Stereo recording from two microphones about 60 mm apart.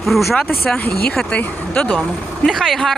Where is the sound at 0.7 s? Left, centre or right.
Centre.